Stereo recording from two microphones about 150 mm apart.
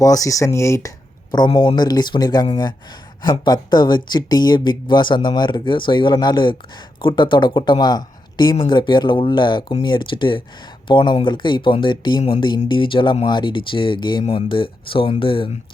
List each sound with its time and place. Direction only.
0.0 s speech: 20° left (ahead or behind)